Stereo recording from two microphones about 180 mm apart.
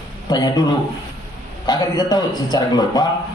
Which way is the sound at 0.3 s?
20° left (ahead or behind).